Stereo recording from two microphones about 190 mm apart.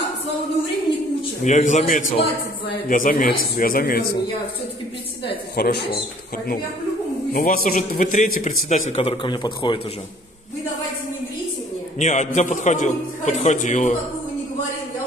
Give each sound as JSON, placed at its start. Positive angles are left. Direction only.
{"t": 1.4, "sound": "a man's voice", "side_deg": 40}
{"t": 5.2, "sound": "a woman's voice", "side_deg": 60}
{"t": 7.3, "sound": "a man's voice", "side_deg": 50}
{"t": 12.0, "sound": "a man's voice", "side_deg": 40}